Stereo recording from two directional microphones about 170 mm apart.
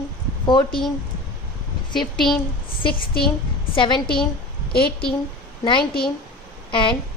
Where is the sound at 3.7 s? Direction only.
30° left (ahead or behind).